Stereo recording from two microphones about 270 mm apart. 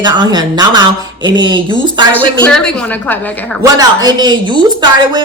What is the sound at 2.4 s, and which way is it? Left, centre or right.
Speech, centre.